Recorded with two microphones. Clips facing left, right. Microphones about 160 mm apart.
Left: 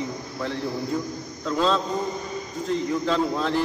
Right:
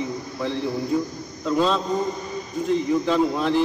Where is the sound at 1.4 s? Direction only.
10° right (ahead or behind).